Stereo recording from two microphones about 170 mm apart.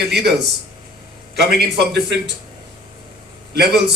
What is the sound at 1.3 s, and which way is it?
A man's voice, 70° right (ahead or behind).